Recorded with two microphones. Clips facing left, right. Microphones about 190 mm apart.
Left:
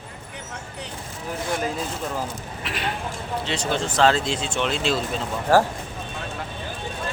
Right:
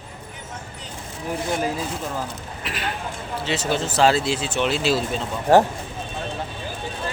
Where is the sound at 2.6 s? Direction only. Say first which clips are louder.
Even; centre (ahead or behind).